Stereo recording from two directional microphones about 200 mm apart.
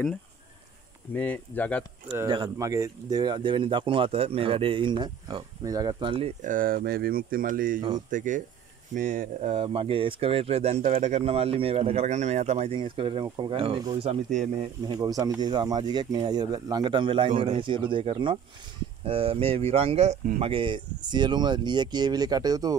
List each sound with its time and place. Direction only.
1.1 s speech: 10° left (ahead or behind)
2.1 s speech: 20° right (ahead or behind)
6.4 s speech: 45° right (ahead or behind)
14.9 s speech: 20° right (ahead or behind)